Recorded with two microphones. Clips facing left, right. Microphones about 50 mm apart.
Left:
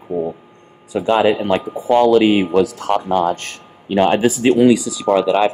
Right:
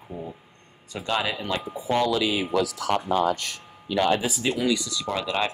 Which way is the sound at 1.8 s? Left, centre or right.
Left.